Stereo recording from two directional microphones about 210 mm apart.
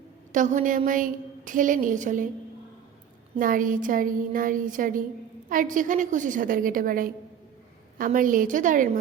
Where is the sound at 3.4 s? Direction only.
40° right (ahead or behind).